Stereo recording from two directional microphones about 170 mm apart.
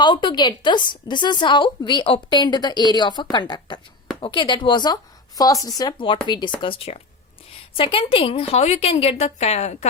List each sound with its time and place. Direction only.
0.0 s a woman's voice: 30° left (ahead or behind)